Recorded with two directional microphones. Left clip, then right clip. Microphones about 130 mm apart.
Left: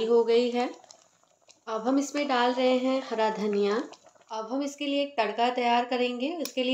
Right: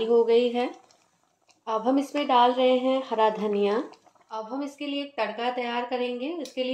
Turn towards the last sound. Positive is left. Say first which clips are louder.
# even
turn(degrees=35)  # may be behind; listen again after turning